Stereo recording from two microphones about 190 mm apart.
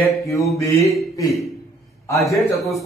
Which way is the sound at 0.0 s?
15° left (ahead or behind).